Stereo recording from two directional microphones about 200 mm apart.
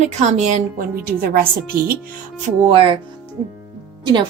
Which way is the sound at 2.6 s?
25° right (ahead or behind).